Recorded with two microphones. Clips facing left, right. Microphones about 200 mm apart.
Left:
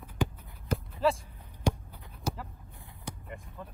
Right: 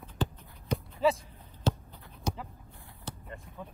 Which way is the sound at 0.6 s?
Centre (ahead or behind).